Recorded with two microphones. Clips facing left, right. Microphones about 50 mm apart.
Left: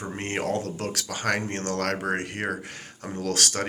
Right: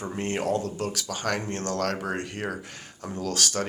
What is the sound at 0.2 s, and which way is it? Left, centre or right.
Speech, left.